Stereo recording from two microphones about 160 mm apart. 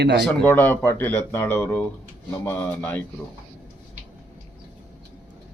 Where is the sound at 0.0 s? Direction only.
90° right.